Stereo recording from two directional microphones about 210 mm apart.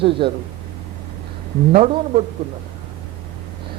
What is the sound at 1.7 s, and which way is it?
Speech, 35° right (ahead or behind).